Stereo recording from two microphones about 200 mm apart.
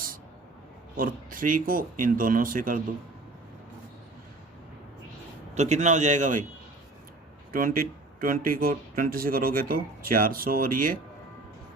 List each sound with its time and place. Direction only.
0.9 s speech: 45° right (ahead or behind)
5.5 s a man's voice: 35° right (ahead or behind)
7.5 s speech: 45° right (ahead or behind)